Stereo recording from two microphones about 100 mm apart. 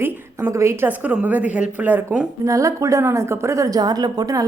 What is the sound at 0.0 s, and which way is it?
A woman's voice, 25° right (ahead or behind).